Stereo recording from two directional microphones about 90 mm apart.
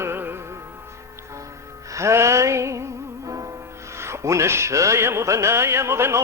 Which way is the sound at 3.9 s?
30° right (ahead or behind).